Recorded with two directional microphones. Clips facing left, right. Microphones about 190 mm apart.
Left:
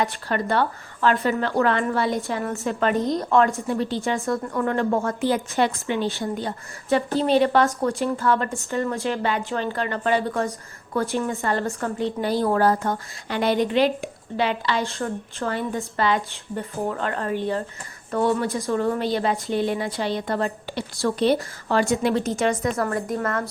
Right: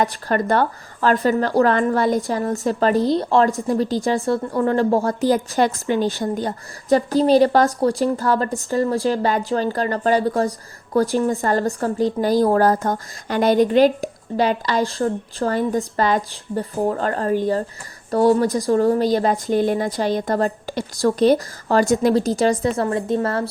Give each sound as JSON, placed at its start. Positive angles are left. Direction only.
{"t": 0.0, "sound": "a woman's voice", "side_deg": -45}